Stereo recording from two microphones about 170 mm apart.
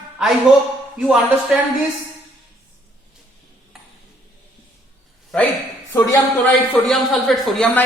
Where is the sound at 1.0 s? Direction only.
5° right (ahead or behind).